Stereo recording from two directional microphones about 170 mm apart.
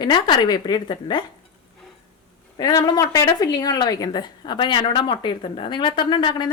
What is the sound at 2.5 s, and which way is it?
A woman's voice, 25° left (ahead or behind).